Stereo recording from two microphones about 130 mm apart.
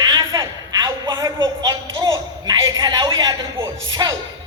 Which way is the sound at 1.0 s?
35° right (ahead or behind).